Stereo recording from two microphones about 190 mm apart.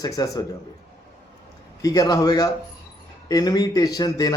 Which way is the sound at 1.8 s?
20° left (ahead or behind).